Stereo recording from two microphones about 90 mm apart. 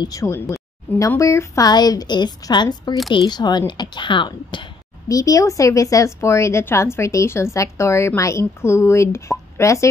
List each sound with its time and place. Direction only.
0.0 s speech: 40° left (ahead or behind)
1.7 s a woman's voice: 50° left (ahead or behind)
5.0 s speech: 40° left (ahead or behind)